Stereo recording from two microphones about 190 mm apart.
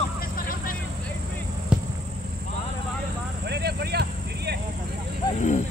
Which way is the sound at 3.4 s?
60° right (ahead or behind).